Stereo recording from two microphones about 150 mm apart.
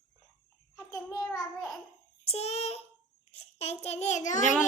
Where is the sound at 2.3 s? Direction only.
45° left (ahead or behind).